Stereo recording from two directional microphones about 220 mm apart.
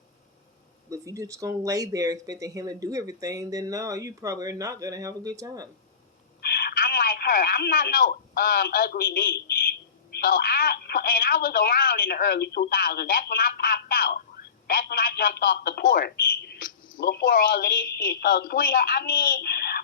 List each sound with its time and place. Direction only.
0.9 s speech: 15° right (ahead or behind)
6.4 s a woman's voice: 45° left (ahead or behind)